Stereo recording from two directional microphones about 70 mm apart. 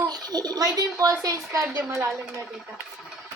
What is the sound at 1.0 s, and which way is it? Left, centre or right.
Speech, right.